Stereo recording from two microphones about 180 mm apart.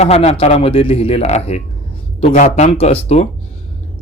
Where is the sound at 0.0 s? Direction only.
35° left (ahead or behind).